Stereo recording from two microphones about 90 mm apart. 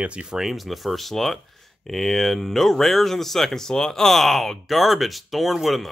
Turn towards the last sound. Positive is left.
turn(degrees=0)  # may be behind; listen again after turning